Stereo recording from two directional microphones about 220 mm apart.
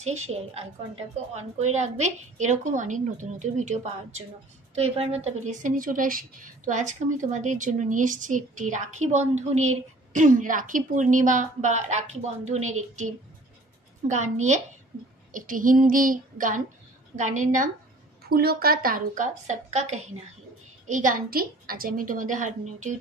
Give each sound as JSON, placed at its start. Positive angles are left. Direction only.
{"t": 0.0, "sound": "a woman's voice", "side_deg": -30}
{"t": 15.3, "sound": "a woman's voice", "side_deg": -35}